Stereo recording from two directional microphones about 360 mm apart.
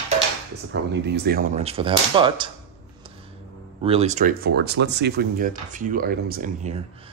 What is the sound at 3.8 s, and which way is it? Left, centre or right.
Speech, centre.